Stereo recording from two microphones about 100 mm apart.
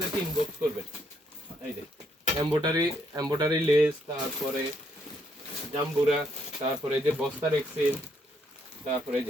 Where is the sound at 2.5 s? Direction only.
40° right (ahead or behind).